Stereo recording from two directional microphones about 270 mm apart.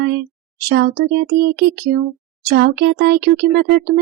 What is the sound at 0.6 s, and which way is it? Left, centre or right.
Speech, right.